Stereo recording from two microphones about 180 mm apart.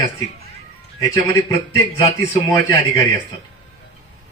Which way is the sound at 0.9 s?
20° left (ahead or behind).